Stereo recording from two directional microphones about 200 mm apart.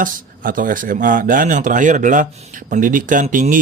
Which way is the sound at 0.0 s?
45° right (ahead or behind).